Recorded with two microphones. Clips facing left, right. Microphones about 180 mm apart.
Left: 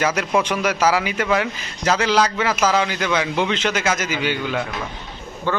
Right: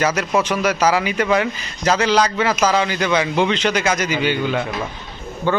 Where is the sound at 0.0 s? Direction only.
10° left (ahead or behind).